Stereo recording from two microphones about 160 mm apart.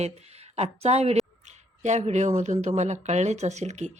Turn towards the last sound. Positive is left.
turn(degrees=-45)  # may be behind; listen again after turning